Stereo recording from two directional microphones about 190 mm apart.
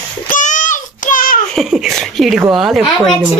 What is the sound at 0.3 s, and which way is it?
Child singing, 40° left (ahead or behind).